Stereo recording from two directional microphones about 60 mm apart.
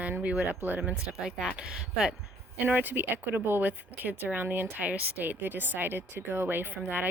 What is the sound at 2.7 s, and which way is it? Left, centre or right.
Speech, right.